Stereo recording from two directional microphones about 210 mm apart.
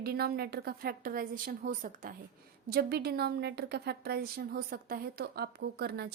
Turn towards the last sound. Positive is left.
turn(degrees=-50)  # may be behind; listen again after turning